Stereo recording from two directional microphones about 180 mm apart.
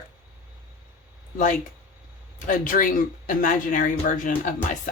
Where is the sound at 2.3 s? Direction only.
50° left (ahead or behind).